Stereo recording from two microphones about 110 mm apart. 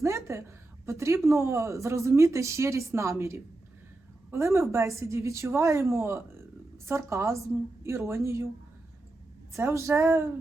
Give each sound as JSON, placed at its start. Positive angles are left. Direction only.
{"t": 0.3, "sound": "a woman's voice", "side_deg": -25}
{"t": 9.5, "sound": "a woman's voice", "side_deg": -25}